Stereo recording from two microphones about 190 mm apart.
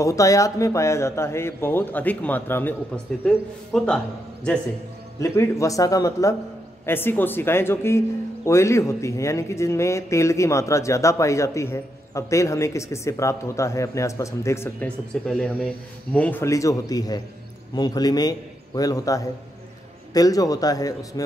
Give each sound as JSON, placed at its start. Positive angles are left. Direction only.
{"t": 0.0, "sound": "a man's voice", "side_deg": 15}
{"t": 5.2, "sound": "speech", "side_deg": 15}
{"t": 15.2, "sound": "a man's voice", "side_deg": 0}